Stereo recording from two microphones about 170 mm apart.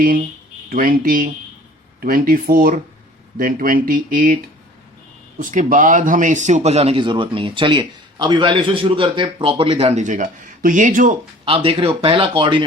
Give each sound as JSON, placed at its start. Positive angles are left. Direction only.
{"t": 0.7, "sound": "speech", "side_deg": -55}
{"t": 5.4, "sound": "speech", "side_deg": -50}
{"t": 10.0, "sound": "speech", "side_deg": -45}
{"t": 11.4, "sound": "speech", "side_deg": -35}